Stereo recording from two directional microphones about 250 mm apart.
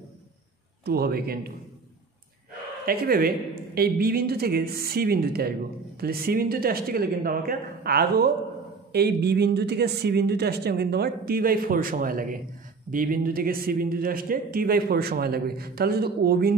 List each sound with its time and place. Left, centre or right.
0.8 s a man's voice: right
2.8 s a man's voice: right